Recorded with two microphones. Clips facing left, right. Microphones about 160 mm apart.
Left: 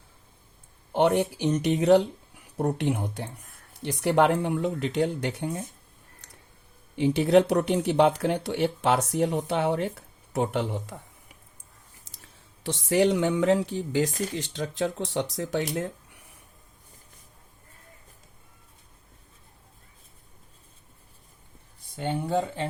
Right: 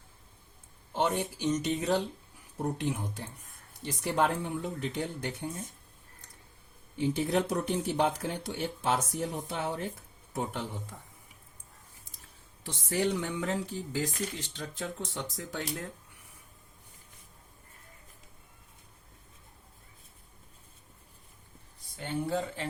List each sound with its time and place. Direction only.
0.9 s speech: 65° left (ahead or behind)
6.2 s a sound: 80° left
6.9 s speech: 75° left (ahead or behind)
12.6 s speech: 80° left
22.0 s speech: 65° left (ahead or behind)